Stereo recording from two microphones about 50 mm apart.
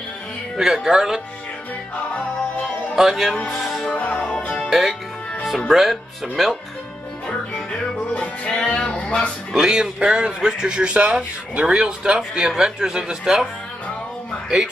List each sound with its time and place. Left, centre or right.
0.8 s speech: centre
3.0 s speech: centre
3.4 s music: centre
4.1 s music: left
4.6 s speech: centre
8.1 s music: left
9.5 s speech: centre